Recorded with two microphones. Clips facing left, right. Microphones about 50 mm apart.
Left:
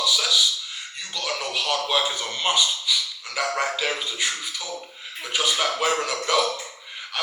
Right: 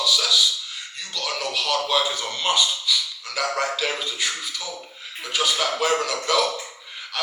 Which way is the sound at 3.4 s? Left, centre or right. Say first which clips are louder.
Even; left.